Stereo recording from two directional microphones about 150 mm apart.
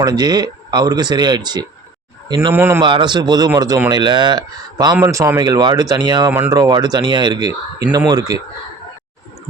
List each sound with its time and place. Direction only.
0.0 s speech: 25° right (ahead or behind)
2.5 s a man's voice: 15° right (ahead or behind)
2.8 s speech: 30° right (ahead or behind)